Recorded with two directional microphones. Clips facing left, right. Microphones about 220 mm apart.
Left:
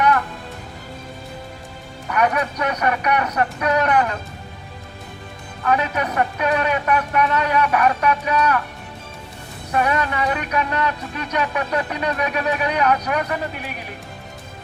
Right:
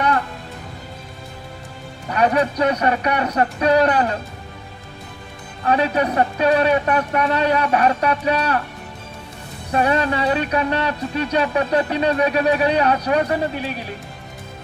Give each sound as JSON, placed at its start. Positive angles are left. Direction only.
{"t": 2.0, "sound": "speech", "side_deg": -30}
{"t": 5.6, "sound": "speech", "side_deg": -30}
{"t": 9.7, "sound": "speech", "side_deg": -30}